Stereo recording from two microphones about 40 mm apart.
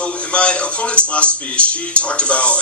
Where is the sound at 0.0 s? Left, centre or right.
Left.